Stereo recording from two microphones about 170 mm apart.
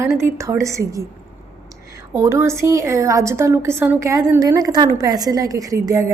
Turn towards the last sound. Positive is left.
turn(degrees=-20)  # may be behind; listen again after turning